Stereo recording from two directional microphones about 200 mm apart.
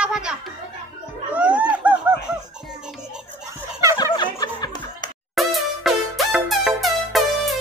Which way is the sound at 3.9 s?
20° left (ahead or behind).